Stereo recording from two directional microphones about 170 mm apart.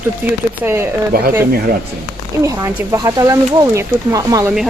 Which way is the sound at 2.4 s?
15° right (ahead or behind).